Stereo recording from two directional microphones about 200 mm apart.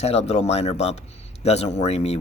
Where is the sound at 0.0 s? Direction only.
30° left (ahead or behind).